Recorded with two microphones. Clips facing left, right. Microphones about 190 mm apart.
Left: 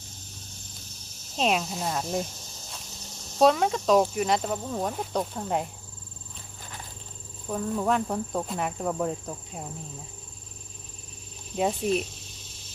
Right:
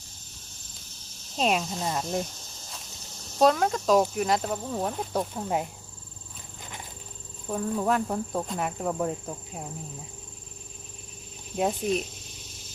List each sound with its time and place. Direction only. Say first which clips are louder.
1.4 s speech: even; centre (ahead or behind)
3.3 s speech: left 1 dB; centre (ahead or behind)
6.6 s horse: right 1 dB; 20° right (ahead or behind)
7.4 s speech: even; centre (ahead or behind)
11.5 s speech: left 1 dB; centre (ahead or behind)